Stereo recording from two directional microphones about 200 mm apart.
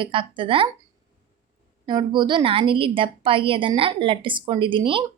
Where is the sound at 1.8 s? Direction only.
25° right (ahead or behind).